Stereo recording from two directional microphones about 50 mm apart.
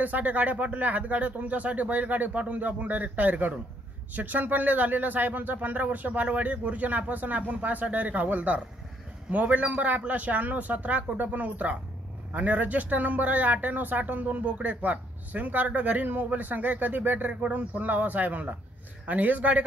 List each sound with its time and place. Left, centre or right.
0.0 s speech: right